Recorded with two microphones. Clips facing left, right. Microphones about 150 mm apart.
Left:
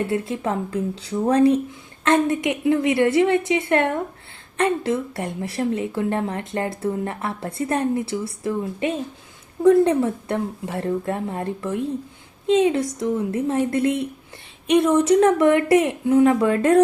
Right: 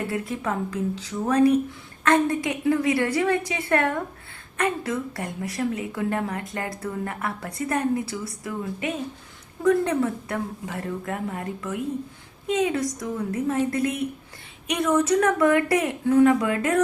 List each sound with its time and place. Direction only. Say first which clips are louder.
0.1 s a woman's voice: left 4 dB; 30° left (ahead or behind)